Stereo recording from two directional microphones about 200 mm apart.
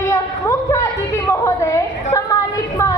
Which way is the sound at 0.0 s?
15° left (ahead or behind).